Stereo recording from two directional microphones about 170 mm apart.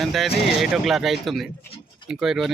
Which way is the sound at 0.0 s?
Centre (ahead or behind).